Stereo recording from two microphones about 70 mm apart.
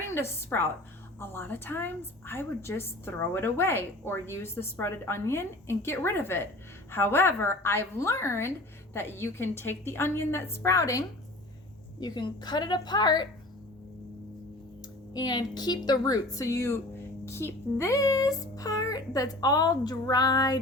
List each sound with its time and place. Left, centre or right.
0.1 s a woman's voice: left
11.9 s a woman's voice: left
15.1 s a child's voice: left